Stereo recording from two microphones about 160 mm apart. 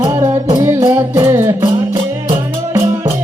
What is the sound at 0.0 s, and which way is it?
Music, 25° right (ahead or behind).